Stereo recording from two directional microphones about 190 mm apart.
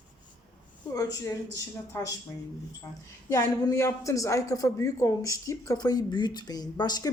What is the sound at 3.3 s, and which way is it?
Speech, 15° left (ahead or behind).